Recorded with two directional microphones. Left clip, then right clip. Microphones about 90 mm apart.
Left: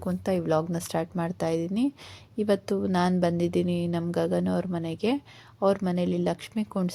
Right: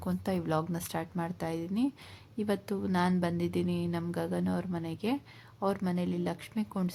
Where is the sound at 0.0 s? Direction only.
35° left (ahead or behind).